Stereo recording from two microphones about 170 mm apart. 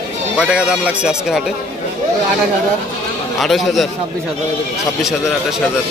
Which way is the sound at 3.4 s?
Centre (ahead or behind).